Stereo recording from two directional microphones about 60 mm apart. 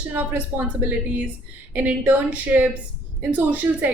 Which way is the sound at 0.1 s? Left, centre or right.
Right.